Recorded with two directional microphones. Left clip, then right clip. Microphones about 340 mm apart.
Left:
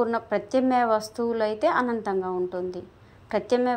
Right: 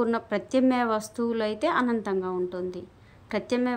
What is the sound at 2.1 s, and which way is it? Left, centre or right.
Speech, centre.